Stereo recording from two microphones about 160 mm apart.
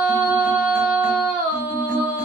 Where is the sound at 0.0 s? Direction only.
5° right (ahead or behind).